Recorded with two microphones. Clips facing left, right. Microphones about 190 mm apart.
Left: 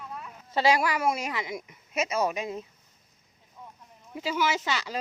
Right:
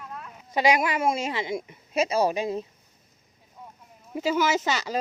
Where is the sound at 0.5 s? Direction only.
15° right (ahead or behind); by 2.6 s 30° right (ahead or behind).